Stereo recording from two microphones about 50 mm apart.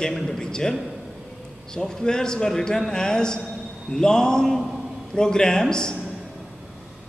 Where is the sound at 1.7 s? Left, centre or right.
Centre.